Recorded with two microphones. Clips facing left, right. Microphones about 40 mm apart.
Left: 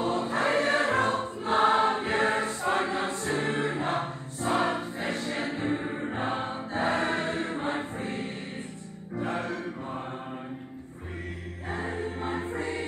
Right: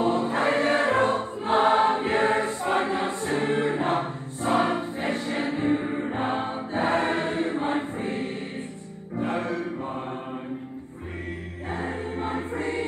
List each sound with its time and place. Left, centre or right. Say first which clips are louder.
0.0 s choir: right 4 dB; right
0.9 s music: right 3 dB; right
1.6 s choir: right 2 dB; centre
4.9 s choir: right 4 dB; right
5.2 s music: right 3 dB; right
5.8 s music: right 4 dB; centre
6.1 s choir: right 3 dB; right
6.8 s choir: right 3 dB; right
7.1 s music: right 4 dB; centre
9.2 s mantra: right 4 dB; right
11.7 s choir: right 2 dB; centre
12.5 s music: right 4 dB; right